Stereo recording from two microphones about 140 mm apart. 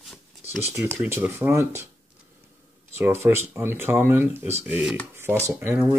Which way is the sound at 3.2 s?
15° right (ahead or behind).